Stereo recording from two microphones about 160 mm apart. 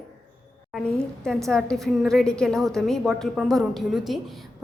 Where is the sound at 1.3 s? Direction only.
5° left (ahead or behind).